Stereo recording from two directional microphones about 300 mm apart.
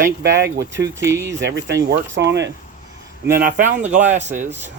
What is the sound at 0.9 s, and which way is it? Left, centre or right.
Speech, centre.